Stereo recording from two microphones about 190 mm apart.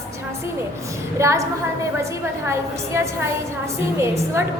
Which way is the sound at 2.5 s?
15° right (ahead or behind).